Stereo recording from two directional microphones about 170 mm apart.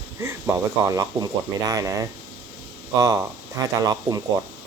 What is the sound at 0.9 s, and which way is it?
Speech, 20° right (ahead or behind).